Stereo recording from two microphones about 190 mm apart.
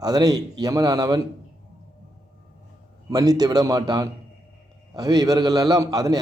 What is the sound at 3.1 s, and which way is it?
A man's voice, 20° right (ahead or behind).